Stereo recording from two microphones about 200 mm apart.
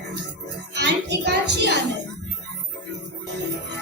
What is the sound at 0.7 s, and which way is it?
Speech, 55° right (ahead or behind).